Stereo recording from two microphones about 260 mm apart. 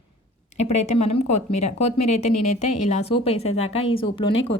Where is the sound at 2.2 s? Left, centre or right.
Left.